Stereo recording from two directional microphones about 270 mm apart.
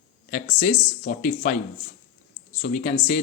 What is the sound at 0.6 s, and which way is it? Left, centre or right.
Speech, left.